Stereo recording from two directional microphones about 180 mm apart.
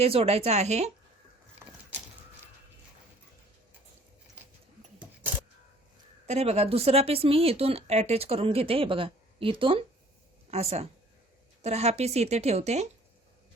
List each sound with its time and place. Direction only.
0.0 s speech: 35° right (ahead or behind)
6.2 s speech: 35° right (ahead or behind)